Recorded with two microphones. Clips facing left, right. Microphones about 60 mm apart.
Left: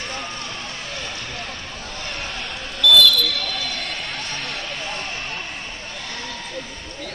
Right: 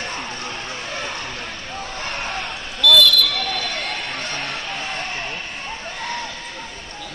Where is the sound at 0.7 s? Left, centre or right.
Right.